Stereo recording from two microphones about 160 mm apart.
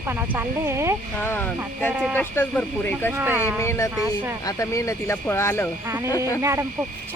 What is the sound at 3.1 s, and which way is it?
Speech, 10° right (ahead or behind).